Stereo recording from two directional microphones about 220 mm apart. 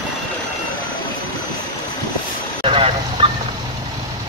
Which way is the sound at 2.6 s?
25° right (ahead or behind).